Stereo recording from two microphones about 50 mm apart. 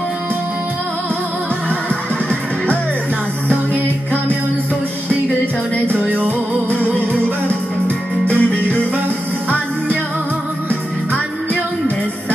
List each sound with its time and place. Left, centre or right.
3.4 s music: right
6.0 s music: right
8.3 s music: left